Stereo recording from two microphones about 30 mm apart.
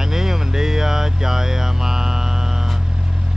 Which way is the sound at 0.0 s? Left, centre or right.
Centre.